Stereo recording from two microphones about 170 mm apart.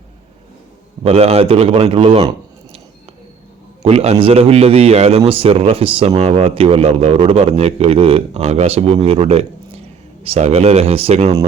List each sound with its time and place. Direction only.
1.0 s a man's voice: 35° right (ahead or behind)
3.8 s a man's voice: 35° right (ahead or behind)